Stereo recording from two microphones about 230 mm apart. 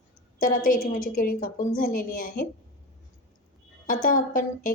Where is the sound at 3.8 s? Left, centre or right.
Left.